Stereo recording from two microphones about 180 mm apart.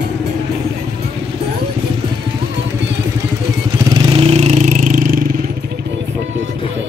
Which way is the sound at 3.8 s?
25° right (ahead or behind).